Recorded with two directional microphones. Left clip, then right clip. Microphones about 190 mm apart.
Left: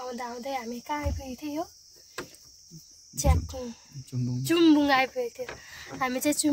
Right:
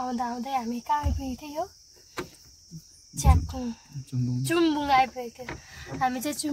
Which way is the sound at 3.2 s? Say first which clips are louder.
Right 1 dB; 10° left (ahead or behind).